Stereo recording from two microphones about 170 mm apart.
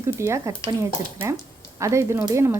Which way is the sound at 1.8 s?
15° right (ahead or behind).